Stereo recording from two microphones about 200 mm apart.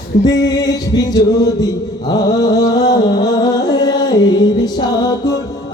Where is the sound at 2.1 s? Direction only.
20° left (ahead or behind).